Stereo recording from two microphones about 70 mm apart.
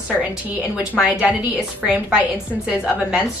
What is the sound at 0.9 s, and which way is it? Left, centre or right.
A woman's voice, centre.